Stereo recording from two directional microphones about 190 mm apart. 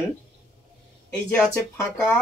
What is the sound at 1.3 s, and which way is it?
Speech, 10° left (ahead or behind).